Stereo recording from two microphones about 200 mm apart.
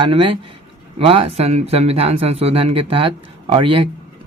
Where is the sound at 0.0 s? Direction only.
25° right (ahead or behind).